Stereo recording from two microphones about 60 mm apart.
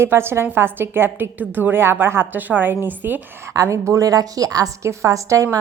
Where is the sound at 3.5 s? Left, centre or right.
Right.